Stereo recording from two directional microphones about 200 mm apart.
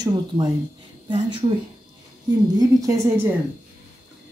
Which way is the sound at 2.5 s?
15° right (ahead or behind).